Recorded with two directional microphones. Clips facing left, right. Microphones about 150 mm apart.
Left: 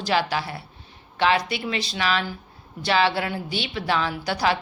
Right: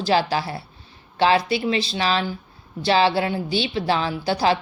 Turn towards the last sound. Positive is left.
turn(degrees=-30)  # may be behind; listen again after turning